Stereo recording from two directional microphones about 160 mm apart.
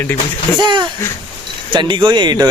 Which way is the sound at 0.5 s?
30° right (ahead or behind).